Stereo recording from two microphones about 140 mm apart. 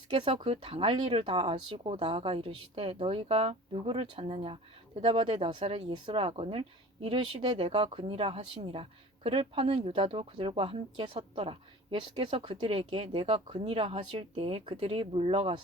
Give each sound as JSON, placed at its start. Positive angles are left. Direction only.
{"t": 0.1, "sound": "a woman's voice", "side_deg": -35}